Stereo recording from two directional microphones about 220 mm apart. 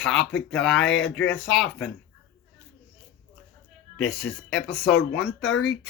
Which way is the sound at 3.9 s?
55° left (ahead or behind).